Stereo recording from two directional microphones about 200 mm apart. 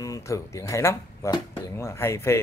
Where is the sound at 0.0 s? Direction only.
15° left (ahead or behind).